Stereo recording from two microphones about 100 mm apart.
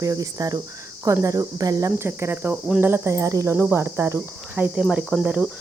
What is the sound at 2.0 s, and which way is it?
Cricket, 25° right (ahead or behind).